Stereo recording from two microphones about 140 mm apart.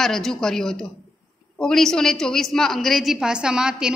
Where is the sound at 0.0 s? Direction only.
5° left (ahead or behind).